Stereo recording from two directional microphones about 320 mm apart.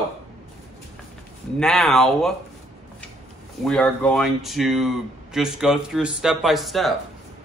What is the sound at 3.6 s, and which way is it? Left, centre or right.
Speech, centre.